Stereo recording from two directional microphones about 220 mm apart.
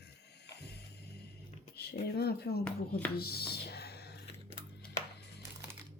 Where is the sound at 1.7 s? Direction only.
45° left (ahead or behind).